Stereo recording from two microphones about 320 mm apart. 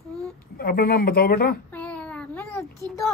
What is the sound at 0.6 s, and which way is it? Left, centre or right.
Speech, left.